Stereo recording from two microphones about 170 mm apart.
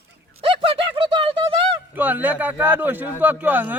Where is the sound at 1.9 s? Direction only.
10° right (ahead or behind).